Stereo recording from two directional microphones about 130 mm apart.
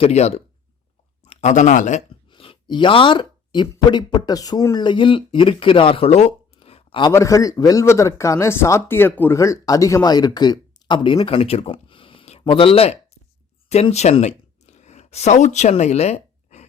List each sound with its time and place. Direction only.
0.0 s speech: 55° left (ahead or behind); by 2.0 s 70° left (ahead or behind)
2.3 s speech: 40° left (ahead or behind)
7.1 s speech: 25° left (ahead or behind)
11.2 s speech: 50° left (ahead or behind); by 15.7 s 65° left (ahead or behind)
15.7 s a sound: 55° left (ahead or behind)